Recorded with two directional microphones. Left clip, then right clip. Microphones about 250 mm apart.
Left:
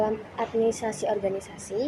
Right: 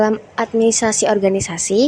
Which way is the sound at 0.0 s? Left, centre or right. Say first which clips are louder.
Right 10 dB; right.